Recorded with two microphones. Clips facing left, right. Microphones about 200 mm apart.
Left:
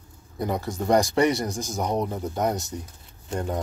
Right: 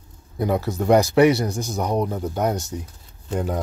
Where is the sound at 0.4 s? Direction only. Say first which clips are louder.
Right 5 dB; 5° right (ahead or behind).